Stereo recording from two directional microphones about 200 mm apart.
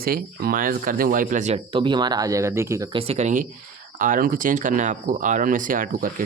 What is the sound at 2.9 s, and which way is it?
Speech, 35° right (ahead or behind).